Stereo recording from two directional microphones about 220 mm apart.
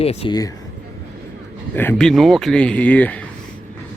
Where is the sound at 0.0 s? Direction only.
25° left (ahead or behind).